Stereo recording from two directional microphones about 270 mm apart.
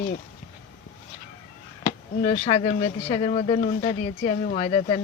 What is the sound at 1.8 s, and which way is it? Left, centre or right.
Speech, left.